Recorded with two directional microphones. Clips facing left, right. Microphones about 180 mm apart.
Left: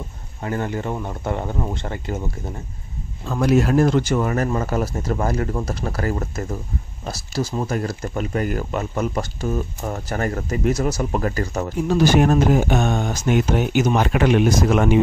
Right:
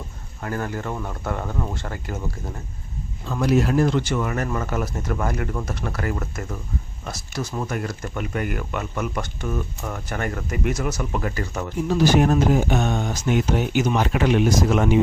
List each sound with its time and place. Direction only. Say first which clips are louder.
0.4 s speech: left 3 dB; 20° left (ahead or behind)
3.3 s speech: left 2 dB; 50° left (ahead or behind)
12.2 s speech: left 2 dB; 55° left (ahead or behind)